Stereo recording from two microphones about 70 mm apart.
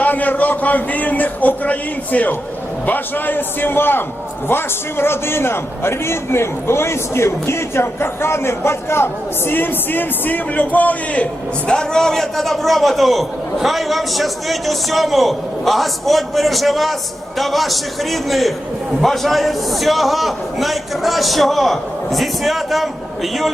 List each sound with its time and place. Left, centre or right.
0.0 s a man's voice: left
11.7 s a man's voice: centre